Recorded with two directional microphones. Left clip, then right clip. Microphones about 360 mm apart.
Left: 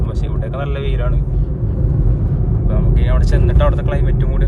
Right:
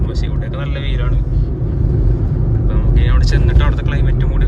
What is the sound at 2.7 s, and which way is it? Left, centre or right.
Speech, centre.